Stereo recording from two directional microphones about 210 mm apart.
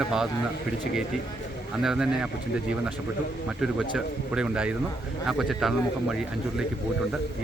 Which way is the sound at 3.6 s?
5° right (ahead or behind).